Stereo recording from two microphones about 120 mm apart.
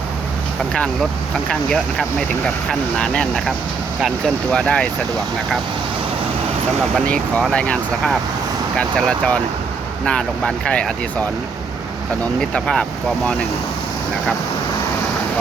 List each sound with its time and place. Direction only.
1.5 s speech: 5° left (ahead or behind)
4.5 s speech: 10° left (ahead or behind)
7.5 s speech: 10° left (ahead or behind)
12.4 s speech: 5° left (ahead or behind)